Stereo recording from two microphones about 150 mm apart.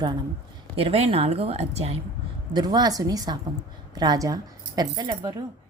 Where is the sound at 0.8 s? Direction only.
40° right (ahead or behind).